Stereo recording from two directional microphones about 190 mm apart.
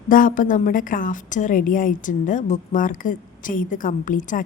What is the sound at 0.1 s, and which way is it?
A woman's voice, 45° left (ahead or behind).